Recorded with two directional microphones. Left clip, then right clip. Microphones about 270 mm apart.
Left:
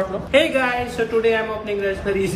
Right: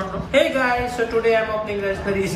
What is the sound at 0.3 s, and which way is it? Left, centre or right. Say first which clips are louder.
Speech: even; centre.